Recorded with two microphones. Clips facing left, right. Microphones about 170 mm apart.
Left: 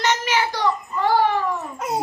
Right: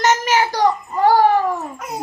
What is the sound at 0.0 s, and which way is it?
Child singing, 45° right (ahead or behind).